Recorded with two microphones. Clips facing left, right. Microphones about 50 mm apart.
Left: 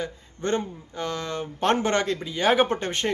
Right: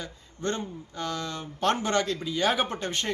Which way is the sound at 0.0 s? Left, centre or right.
Left.